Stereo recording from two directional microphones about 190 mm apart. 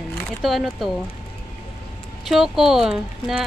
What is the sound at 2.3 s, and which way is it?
Speech, centre (ahead or behind).